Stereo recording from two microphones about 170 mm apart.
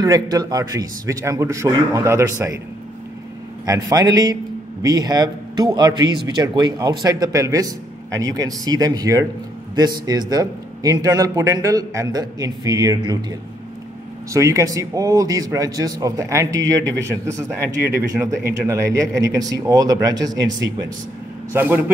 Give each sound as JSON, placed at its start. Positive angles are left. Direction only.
{"t": 0.0, "sound": "a man's voice", "side_deg": -20}
{"t": 3.6, "sound": "a man's voice", "side_deg": -20}
{"t": 14.3, "sound": "a man's voice", "side_deg": -20}
{"t": 21.5, "sound": "a man's voice", "side_deg": -10}